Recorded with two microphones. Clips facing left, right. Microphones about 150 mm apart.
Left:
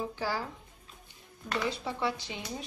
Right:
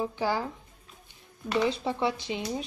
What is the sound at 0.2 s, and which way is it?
Speech, 20° right (ahead or behind).